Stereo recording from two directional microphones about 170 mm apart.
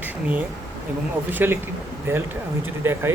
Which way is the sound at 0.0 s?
10° right (ahead or behind).